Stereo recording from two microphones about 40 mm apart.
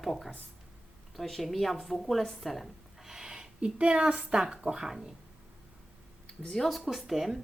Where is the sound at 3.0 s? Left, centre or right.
Centre.